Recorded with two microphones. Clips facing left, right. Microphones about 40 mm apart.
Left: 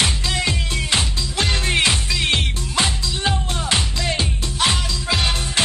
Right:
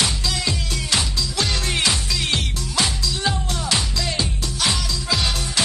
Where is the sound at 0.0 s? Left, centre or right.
Left.